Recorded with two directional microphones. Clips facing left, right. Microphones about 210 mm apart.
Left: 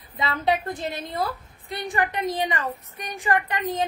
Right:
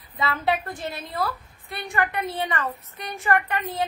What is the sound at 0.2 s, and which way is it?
A woman's voice, 20° left (ahead or behind).